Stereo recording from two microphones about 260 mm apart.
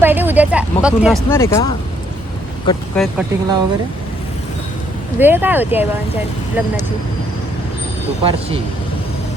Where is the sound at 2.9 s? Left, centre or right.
Centre.